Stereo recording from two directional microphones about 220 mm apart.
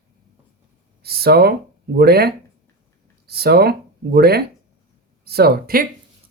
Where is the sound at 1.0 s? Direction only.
45° right (ahead or behind).